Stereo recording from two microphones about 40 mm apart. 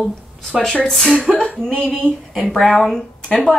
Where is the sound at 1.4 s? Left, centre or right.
Centre.